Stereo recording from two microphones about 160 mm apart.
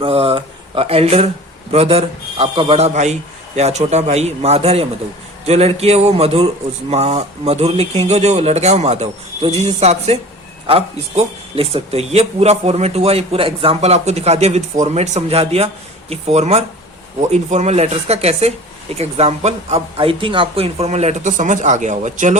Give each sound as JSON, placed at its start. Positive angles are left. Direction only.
{"t": 0.0, "sound": "speech", "side_deg": -35}